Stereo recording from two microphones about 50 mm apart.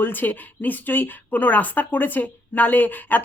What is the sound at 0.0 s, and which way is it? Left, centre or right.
Speech, left.